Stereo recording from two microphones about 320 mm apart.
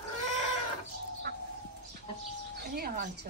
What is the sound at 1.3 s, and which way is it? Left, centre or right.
Bird, right.